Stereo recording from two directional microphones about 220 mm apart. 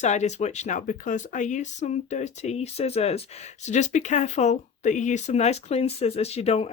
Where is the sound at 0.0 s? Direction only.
30° left (ahead or behind).